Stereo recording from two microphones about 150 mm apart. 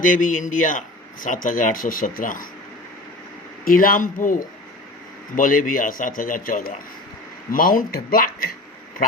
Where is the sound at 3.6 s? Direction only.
70° left (ahead or behind).